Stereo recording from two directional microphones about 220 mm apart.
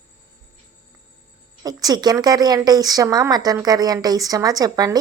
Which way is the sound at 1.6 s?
15° right (ahead or behind).